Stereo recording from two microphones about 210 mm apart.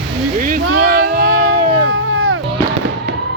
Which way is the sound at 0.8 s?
45° right (ahead or behind).